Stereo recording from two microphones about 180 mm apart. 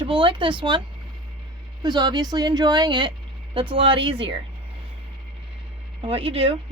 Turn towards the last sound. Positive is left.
turn(degrees=-30)  # may be behind; listen again after turning